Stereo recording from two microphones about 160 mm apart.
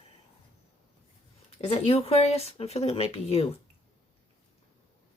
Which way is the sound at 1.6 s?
40° left (ahead or behind).